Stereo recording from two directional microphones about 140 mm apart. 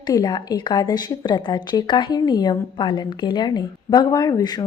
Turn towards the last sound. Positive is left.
turn(degrees=30)  # may be behind; listen again after turning